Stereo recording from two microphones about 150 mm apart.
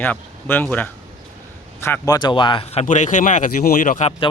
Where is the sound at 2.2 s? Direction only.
30° left (ahead or behind); by 4.1 s 55° left (ahead or behind).